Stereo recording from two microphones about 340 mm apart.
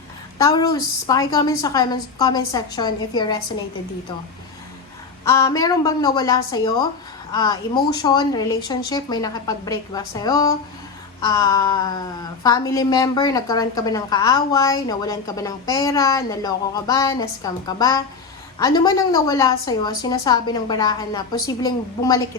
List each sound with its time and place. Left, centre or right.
0.3 s a woman's voice: centre
5.2 s a woman's voice: centre